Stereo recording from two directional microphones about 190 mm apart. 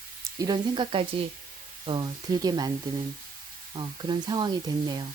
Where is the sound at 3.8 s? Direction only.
25° right (ahead or behind).